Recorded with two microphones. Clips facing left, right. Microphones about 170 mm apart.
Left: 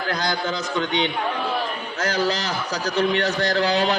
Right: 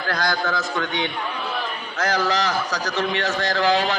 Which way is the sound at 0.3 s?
20° left (ahead or behind).